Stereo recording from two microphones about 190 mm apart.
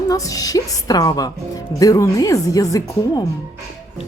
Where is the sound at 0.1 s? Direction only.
20° left (ahead or behind).